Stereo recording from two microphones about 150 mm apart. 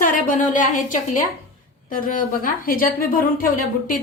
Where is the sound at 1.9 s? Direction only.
70° left (ahead or behind).